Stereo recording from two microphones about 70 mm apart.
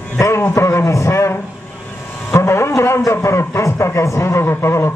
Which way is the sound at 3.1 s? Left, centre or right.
Left.